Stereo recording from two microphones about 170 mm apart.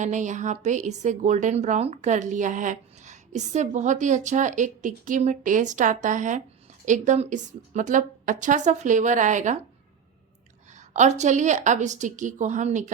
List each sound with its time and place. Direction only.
0.0 s a woman's voice: 45° right (ahead or behind)
10.8 s a woman's voice: 45° right (ahead or behind)